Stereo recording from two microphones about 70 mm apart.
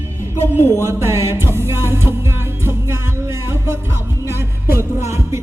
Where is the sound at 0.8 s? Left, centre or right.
Right.